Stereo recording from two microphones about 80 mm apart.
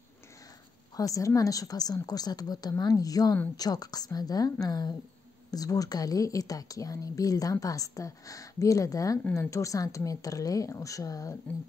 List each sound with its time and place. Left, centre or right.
0.9 s a woman's voice: left